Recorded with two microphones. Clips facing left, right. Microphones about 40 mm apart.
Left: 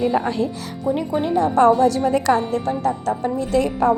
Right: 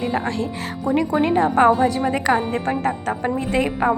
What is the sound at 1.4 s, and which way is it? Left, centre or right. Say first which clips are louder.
Speech: left 1 dB; right.